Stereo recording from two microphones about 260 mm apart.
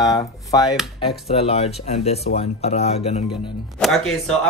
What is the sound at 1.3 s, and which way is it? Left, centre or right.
Speech, left.